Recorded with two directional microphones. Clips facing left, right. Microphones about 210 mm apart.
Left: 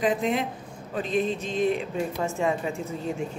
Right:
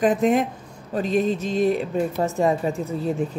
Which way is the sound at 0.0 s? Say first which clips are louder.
Right 6 dB; 50° right (ahead or behind).